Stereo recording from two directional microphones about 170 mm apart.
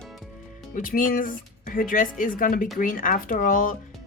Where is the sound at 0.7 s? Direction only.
55° left (ahead or behind).